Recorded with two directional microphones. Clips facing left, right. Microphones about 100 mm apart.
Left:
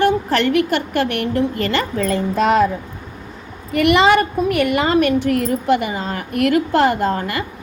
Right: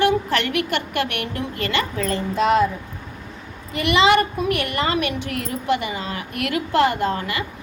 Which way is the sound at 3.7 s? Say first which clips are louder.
Left 4 dB; 50° left (ahead or behind).